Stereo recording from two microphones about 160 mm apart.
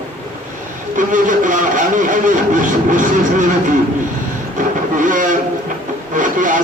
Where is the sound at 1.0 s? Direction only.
55° right (ahead or behind).